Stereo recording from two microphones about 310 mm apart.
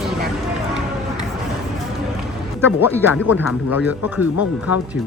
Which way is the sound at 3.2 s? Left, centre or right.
Left.